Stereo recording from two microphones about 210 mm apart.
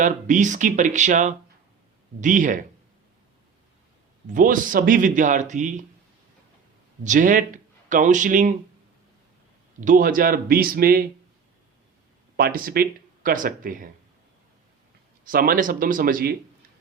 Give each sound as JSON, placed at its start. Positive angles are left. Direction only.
{"t": 0.0, "sound": "speech", "side_deg": -35}
{"t": 4.4, "sound": "speech", "side_deg": -40}
{"t": 7.0, "sound": "speech", "side_deg": -40}
{"t": 9.8, "sound": "speech", "side_deg": -40}
{"t": 12.4, "sound": "speech", "side_deg": -45}
{"t": 15.2, "sound": "speech", "side_deg": -40}